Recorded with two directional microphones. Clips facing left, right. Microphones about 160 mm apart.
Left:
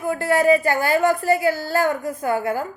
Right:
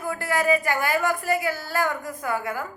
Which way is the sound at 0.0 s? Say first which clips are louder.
Left 6 dB; 25° left (ahead or behind).